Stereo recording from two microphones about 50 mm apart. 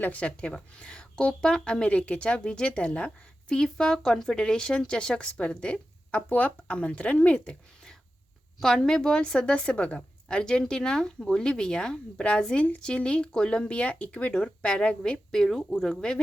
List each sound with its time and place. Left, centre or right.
0.0 s a woman's voice: left
8.6 s a woman's voice: centre